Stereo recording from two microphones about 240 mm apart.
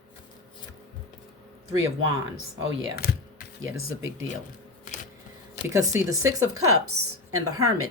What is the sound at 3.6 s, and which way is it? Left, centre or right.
Speech, right.